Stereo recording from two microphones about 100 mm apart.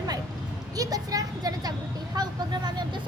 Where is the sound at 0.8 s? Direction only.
40° right (ahead or behind).